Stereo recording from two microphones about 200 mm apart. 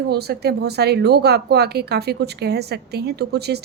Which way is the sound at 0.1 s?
55° right (ahead or behind).